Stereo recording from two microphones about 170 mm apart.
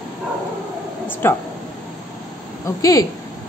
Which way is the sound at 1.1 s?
10° left (ahead or behind).